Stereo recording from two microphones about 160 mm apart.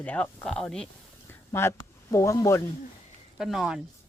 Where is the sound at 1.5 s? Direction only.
15° left (ahead or behind).